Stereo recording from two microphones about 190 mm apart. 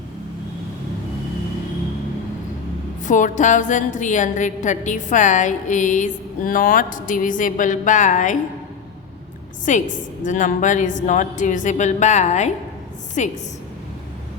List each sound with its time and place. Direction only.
3.0 s a woman's voice: 40° left (ahead or behind)
9.7 s a woman's voice: 40° left (ahead or behind)